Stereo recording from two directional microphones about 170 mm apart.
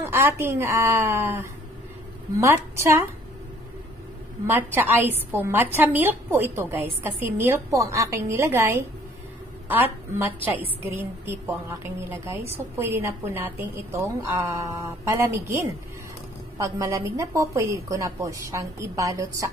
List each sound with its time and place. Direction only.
0.0 s a woman's voice: 15° right (ahead or behind)
4.5 s a woman's voice: 10° right (ahead or behind)